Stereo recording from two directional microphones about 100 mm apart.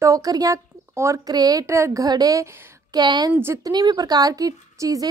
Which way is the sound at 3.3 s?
20° right (ahead or behind).